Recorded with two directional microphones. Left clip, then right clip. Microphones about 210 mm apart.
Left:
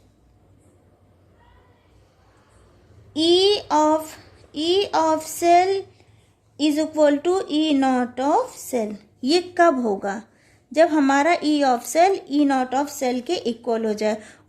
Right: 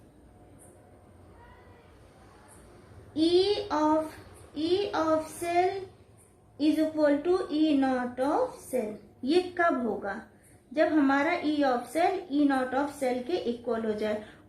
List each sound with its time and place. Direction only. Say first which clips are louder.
3.1 s child singing: left 7 dB; 45° left (ahead or behind)
4.5 s a woman's voice: left 8 dB; 45° left (ahead or behind)